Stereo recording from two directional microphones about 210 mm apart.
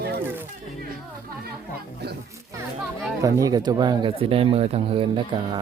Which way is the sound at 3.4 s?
20° right (ahead or behind).